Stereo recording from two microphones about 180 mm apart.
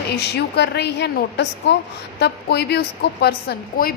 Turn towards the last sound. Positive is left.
turn(degrees=55)  # may be behind; listen again after turning